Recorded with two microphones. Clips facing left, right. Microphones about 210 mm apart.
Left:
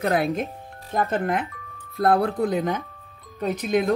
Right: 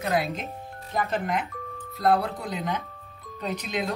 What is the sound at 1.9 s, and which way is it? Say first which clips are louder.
Speech: left 4 dB; 50° left (ahead or behind).